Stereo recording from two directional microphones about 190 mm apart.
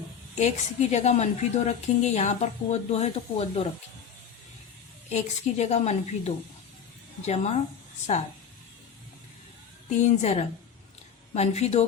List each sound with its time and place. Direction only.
0.3 s speech: 35° left (ahead or behind)
5.1 s speech: 35° left (ahead or behind)
10.0 s speech: 35° left (ahead or behind)